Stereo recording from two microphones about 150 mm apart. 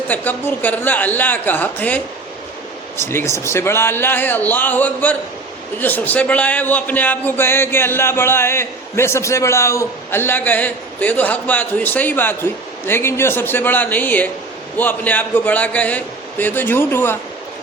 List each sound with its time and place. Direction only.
0.1 s a man's voice: 10° left (ahead or behind)
3.0 s a man's voice: 15° left (ahead or behind)